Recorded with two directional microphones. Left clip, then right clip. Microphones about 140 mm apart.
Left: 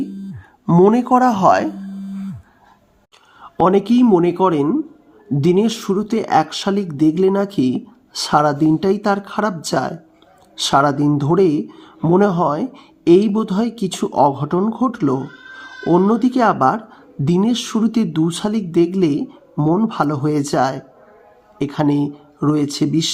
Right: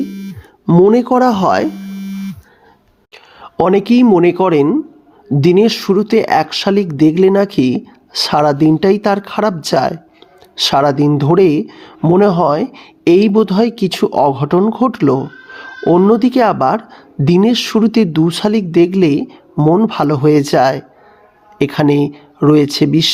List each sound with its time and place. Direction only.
0.7 s speech: 20° right (ahead or behind)
3.6 s speech: 35° right (ahead or behind)